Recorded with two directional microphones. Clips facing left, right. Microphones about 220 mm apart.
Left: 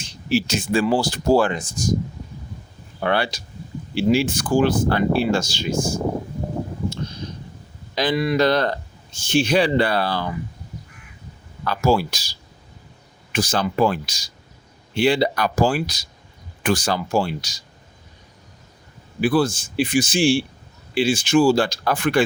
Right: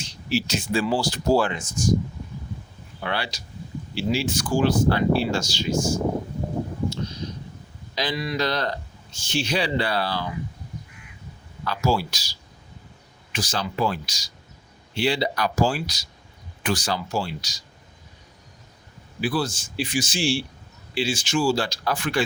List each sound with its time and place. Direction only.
0.0 s speech: 50° left (ahead or behind)
3.0 s speech: 55° left (ahead or behind)
7.9 s speech: 55° left (ahead or behind)
11.6 s speech: 55° left (ahead or behind)
19.2 s speech: 55° left (ahead or behind)